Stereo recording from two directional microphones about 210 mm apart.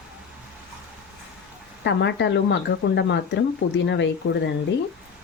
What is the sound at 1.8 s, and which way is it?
Speech, 55° left (ahead or behind).